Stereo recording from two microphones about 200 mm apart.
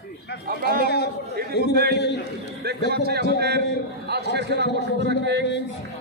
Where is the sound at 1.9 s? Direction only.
55° left (ahead or behind).